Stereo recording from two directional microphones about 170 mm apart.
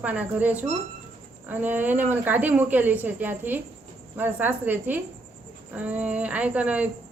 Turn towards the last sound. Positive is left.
turn(degrees=-10)  # may be behind; listen again after turning